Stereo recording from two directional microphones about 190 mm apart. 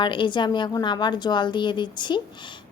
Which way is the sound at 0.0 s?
25° left (ahead or behind).